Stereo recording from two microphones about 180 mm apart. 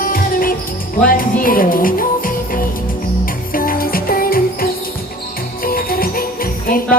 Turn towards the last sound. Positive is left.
turn(degrees=55)  # may be behind; listen again after turning